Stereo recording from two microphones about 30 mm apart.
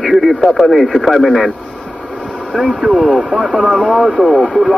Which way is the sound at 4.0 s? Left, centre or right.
Centre.